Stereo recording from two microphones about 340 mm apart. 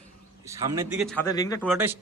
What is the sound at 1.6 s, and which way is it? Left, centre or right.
Speech, centre.